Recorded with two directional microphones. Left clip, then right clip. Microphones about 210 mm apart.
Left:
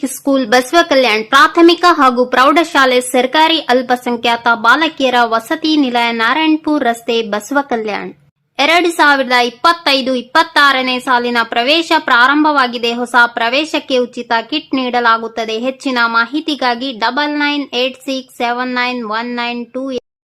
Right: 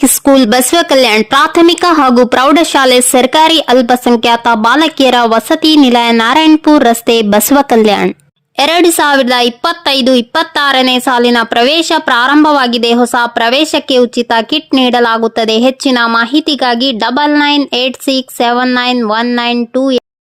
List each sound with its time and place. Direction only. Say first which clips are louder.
0.0 s a woman's voice: right 8 dB; 45° right (ahead or behind)